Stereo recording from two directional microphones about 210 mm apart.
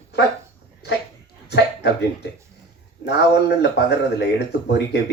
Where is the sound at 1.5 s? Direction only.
55° left (ahead or behind).